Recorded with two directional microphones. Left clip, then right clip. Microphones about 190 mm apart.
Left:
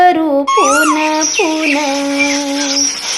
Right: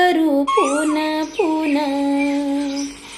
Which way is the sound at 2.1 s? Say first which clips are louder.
Left 6 dB; 55° left (ahead or behind).